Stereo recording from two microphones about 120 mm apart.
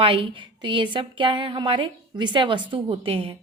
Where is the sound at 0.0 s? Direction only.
45° right (ahead or behind).